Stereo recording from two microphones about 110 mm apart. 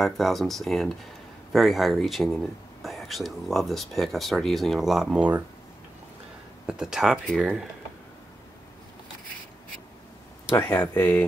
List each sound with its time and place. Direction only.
0.0 s speech: centre (ahead or behind)
6.6 s speech: 5° right (ahead or behind)
10.5 s speech: 15° left (ahead or behind)